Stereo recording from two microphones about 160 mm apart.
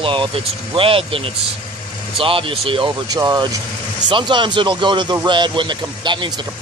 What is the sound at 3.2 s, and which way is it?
Speech, 20° right (ahead or behind).